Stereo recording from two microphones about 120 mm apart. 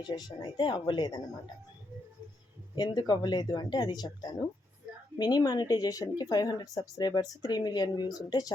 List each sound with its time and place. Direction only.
0.1 s speech: 40° left (ahead or behind)
2.7 s speech: 35° left (ahead or behind)